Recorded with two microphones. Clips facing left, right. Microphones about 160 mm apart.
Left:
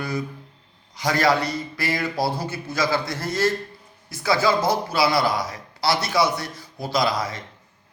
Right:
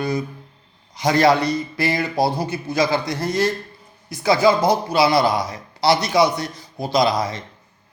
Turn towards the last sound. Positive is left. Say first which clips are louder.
# right 4 dB
turn(degrees=-20)  # may be behind; listen again after turning